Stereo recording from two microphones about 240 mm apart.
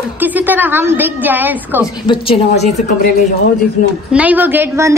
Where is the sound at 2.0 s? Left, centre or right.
Left.